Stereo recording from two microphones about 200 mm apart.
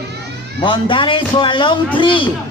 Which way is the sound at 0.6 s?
25° left (ahead or behind).